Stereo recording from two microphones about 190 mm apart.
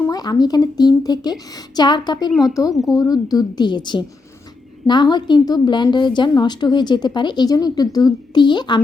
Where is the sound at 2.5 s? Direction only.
20° left (ahead or behind).